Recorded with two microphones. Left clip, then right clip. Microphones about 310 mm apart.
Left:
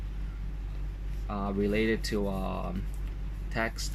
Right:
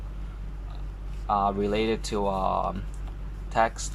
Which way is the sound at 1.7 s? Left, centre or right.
Centre.